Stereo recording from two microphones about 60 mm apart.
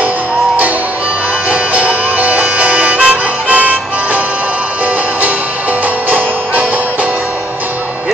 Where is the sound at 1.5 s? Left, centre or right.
Right.